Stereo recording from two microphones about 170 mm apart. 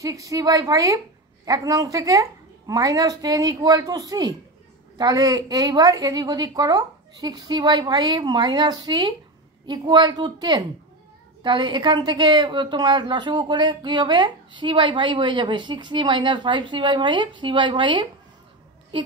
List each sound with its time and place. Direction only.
0.0 s a woman's voice: 20° right (ahead or behind)